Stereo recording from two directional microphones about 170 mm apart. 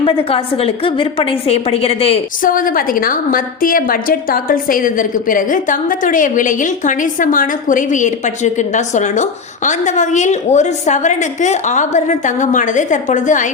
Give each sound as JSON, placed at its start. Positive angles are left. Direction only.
{"t": 0.0, "sound": "a woman's voice", "side_deg": 35}
{"t": 2.4, "sound": "a woman's voice", "side_deg": 55}